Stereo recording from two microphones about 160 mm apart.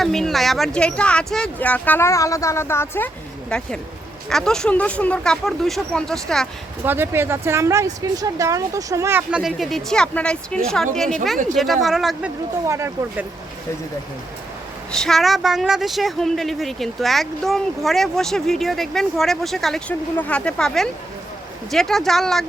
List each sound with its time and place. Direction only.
0.0 s speech: centre (ahead or behind)
6.8 s speech: 15° right (ahead or behind)
9.4 s speech: centre (ahead or behind)
12.6 s speech: 15° right (ahead or behind)
14.9 s speech: centre (ahead or behind)